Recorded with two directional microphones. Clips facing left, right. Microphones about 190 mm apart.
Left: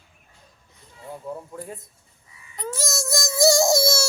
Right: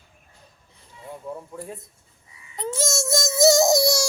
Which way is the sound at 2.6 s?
25° right (ahead or behind).